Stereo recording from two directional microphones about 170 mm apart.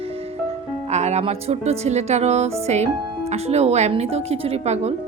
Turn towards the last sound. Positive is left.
turn(degrees=-40)  # may be behind; listen again after turning